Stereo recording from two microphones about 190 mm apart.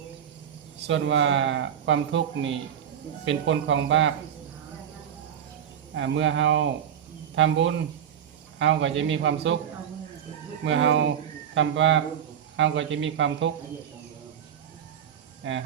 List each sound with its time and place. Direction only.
0.9 s a man's voice: 80° right
5.9 s a man's voice: 75° right (ahead or behind)
10.6 s a man's voice: 75° right (ahead or behind)